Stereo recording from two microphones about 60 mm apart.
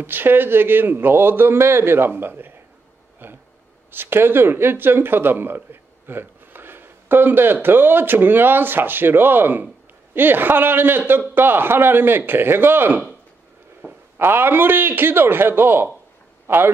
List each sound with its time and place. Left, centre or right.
0.0 s a man's voice: right
3.2 s a sound: right
3.9 s a man's voice: right
14.1 s a man's voice: right